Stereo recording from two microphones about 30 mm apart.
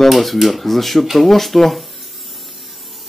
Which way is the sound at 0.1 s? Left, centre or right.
Centre.